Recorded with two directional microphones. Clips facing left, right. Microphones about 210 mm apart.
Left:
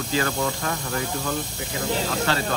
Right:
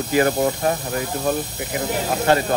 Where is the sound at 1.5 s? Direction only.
20° right (ahead or behind).